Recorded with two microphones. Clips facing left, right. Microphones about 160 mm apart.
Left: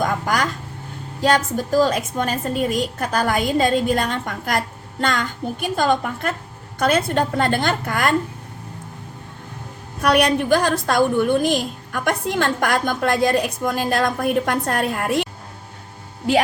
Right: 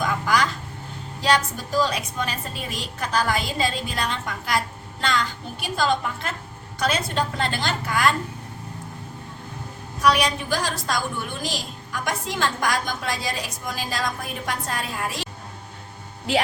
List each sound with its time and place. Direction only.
0.0 s vehicle: 50° left (ahead or behind)
1.2 s a woman's voice: 50° left (ahead or behind)
10.0 s a woman's voice: 60° left (ahead or behind)